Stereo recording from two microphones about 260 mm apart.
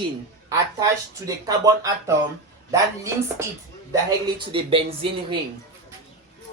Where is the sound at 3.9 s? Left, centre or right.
Centre.